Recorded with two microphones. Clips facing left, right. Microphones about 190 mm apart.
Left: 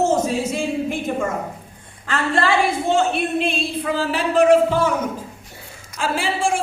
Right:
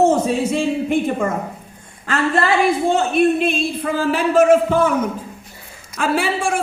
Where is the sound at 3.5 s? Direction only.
45° right (ahead or behind).